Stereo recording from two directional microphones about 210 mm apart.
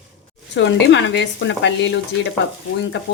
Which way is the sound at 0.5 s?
60° left (ahead or behind).